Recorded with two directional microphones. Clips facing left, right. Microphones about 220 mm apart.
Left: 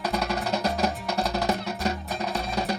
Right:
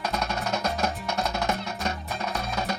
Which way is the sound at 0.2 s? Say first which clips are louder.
Left 2 dB; 35° left (ahead or behind).